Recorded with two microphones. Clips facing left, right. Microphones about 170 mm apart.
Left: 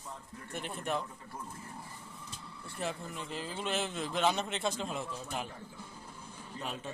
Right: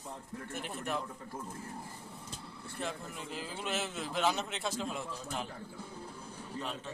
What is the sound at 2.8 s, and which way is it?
Speech, 5° left (ahead or behind).